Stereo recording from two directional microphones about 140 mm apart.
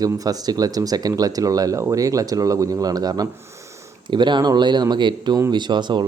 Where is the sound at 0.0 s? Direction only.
25° right (ahead or behind).